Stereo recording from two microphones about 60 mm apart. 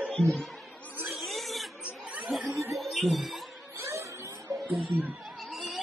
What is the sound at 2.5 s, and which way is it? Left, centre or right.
Music, right.